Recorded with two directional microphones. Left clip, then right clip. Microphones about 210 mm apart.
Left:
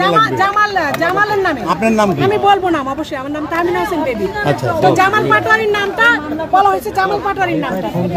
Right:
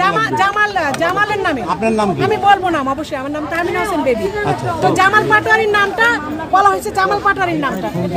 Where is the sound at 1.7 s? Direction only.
45° left (ahead or behind).